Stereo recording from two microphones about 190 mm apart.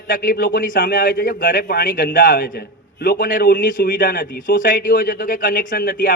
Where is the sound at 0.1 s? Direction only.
50° left (ahead or behind).